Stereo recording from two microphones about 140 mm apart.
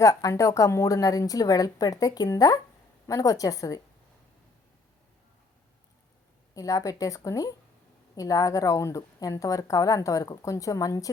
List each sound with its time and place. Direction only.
0.0 s a woman's voice: 25° left (ahead or behind)
6.5 s a woman's voice: 25° left (ahead or behind)